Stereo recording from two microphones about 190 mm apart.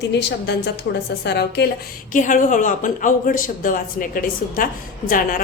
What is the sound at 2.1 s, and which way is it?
Speech, 45° left (ahead or behind).